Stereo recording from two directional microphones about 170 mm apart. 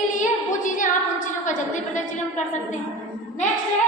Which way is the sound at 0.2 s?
50° left (ahead or behind).